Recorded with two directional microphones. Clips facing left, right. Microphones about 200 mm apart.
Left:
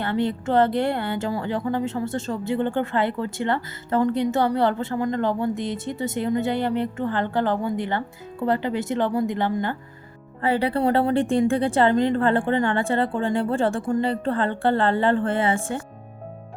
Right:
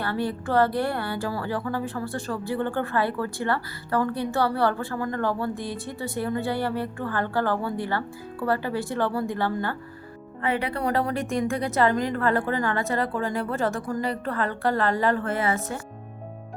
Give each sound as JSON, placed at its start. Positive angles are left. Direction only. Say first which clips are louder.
{"t": 0.0, "sound": "a woman's voice", "louder": "left 4 dB", "side_deg": 20}
{"t": 10.4, "sound": "a woman's voice", "louder": "left 5 dB", "side_deg": 30}